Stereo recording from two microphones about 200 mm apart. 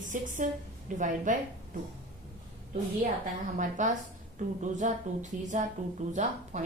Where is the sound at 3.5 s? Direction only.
40° right (ahead or behind).